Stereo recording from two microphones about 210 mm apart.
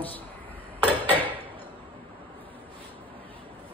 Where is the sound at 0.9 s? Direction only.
10° left (ahead or behind).